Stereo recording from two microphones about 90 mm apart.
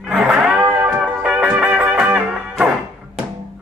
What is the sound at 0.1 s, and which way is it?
Music, 10° right (ahead or behind).